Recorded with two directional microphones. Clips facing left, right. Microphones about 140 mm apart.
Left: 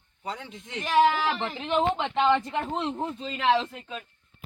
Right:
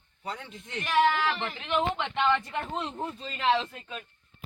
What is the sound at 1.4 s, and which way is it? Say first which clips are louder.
Speech: left 3 dB; 30° left (ahead or behind).